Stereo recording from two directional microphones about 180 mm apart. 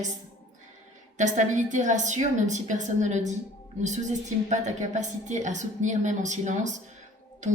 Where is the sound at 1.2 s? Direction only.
40° right (ahead or behind).